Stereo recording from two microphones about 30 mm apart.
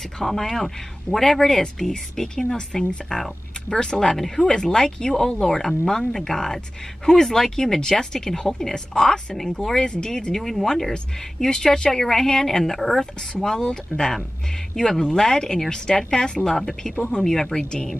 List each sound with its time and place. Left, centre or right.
0.2 s speech: centre
9.8 s speech: left
10.3 s speech: centre